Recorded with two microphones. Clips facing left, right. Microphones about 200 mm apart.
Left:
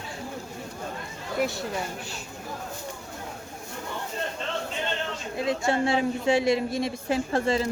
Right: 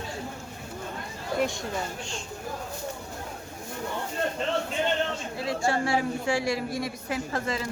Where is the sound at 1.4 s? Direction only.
5° left (ahead or behind).